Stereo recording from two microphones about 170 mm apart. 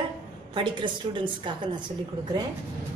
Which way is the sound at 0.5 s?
30° right (ahead or behind).